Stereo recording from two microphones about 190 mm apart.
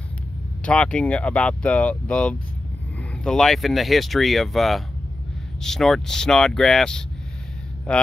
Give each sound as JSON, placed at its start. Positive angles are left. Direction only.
{"t": 0.7, "sound": "speech", "side_deg": 5}